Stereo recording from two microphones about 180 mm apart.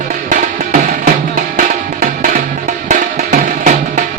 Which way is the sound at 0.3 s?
50° right (ahead or behind).